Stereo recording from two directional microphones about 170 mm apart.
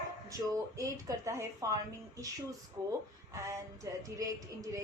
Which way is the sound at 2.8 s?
20° right (ahead or behind).